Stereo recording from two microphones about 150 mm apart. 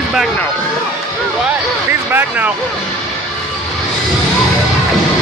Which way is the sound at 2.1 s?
15° right (ahead or behind).